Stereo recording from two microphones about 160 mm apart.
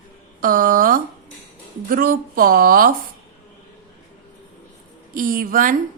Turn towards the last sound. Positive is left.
turn(degrees=-60)  # may be behind; listen again after turning